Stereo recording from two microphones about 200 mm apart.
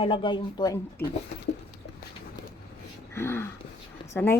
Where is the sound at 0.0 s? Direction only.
25° left (ahead or behind).